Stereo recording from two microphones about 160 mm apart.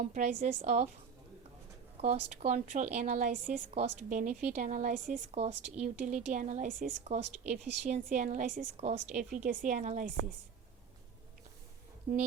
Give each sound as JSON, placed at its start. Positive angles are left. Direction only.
{"t": 0.0, "sound": "a woman's voice", "side_deg": -50}
{"t": 2.0, "sound": "a woman's voice", "side_deg": -40}
{"t": 12.1, "sound": "a woman's voice", "side_deg": -50}